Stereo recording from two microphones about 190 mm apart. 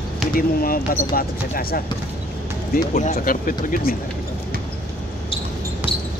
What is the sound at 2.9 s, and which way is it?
Speech, 40° left (ahead or behind).